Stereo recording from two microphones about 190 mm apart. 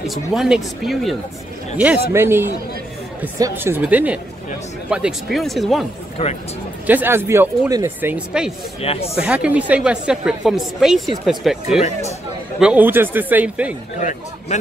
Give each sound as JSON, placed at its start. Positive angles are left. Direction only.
{"t": 0.0, "sound": "a woman's voice", "side_deg": 0}
{"t": 2.1, "sound": "a woman's voice", "side_deg": -10}
{"t": 6.2, "sound": "a man's voice", "side_deg": 30}
{"t": 6.9, "sound": "speech", "side_deg": -10}
{"t": 8.8, "sound": "a man's voice", "side_deg": 30}
{"t": 9.1, "sound": "a woman's voice", "side_deg": -5}
{"t": 13.9, "sound": "a man's voice", "side_deg": 40}